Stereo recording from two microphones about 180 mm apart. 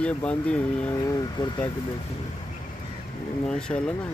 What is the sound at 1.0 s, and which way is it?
Speech, 20° left (ahead or behind).